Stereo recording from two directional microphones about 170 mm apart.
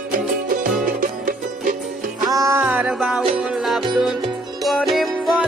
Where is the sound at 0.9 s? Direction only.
55° right (ahead or behind).